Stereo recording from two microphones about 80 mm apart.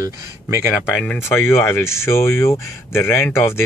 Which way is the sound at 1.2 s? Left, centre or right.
Left.